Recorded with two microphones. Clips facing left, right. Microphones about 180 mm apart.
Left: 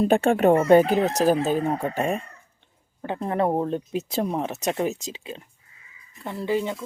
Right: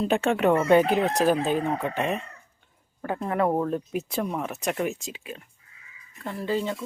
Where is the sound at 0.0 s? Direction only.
50° left (ahead or behind).